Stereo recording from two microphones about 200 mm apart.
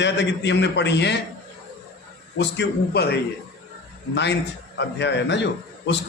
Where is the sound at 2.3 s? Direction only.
60° left (ahead or behind).